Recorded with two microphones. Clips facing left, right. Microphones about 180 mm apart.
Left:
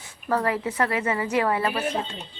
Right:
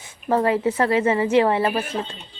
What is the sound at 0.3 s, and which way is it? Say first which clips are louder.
A woman's voice: right 5 dB; 25° right (ahead or behind).